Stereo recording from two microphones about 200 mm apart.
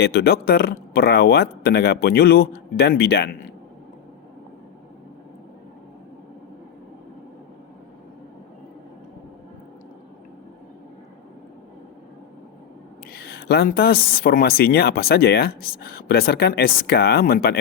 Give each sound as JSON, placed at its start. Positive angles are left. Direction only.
{"t": 0.0, "sound": "speech", "side_deg": 55}
{"t": 13.1, "sound": "speech", "side_deg": 55}